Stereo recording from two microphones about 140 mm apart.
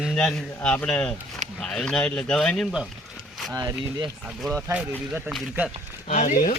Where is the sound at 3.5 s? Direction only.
30° right (ahead or behind).